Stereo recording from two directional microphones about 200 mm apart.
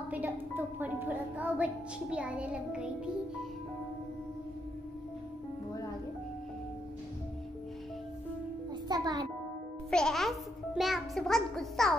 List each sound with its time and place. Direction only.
0.1 s a woman's voice: 10° right (ahead or behind)
8.8 s a child's voice: 20° right (ahead or behind)
9.8 s a child's voice: 5° left (ahead or behind)